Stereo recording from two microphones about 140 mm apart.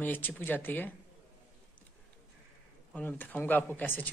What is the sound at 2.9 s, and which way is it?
Speech, 10° left (ahead or behind).